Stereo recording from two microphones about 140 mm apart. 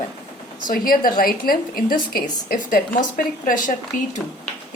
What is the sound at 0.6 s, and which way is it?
A woman's voice, 90° left.